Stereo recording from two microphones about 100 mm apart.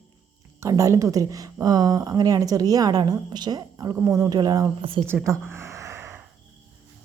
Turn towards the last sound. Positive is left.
turn(degrees=-25)  # may be behind; listen again after turning